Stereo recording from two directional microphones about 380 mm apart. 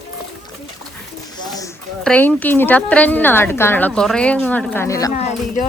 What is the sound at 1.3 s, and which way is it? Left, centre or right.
A woman's voice, centre.